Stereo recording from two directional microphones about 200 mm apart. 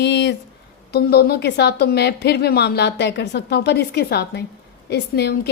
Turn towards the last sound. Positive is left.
turn(degrees=55)  # may be behind; listen again after turning